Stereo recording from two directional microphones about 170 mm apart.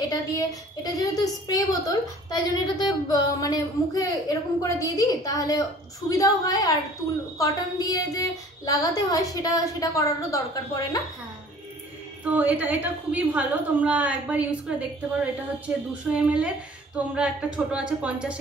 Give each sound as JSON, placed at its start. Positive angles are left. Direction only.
{"t": 0.8, "sound": "a woman's voice", "side_deg": 20}
{"t": 12.3, "sound": "a woman's voice", "side_deg": -10}